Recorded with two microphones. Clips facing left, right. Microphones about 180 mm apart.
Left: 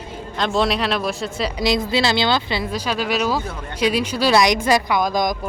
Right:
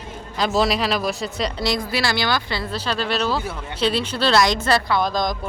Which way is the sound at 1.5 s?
20° left (ahead or behind).